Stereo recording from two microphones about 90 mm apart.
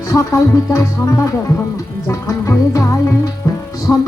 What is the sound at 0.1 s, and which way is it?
Speech, 35° left (ahead or behind).